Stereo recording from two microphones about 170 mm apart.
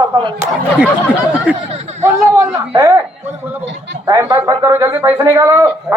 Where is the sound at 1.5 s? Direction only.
5° right (ahead or behind).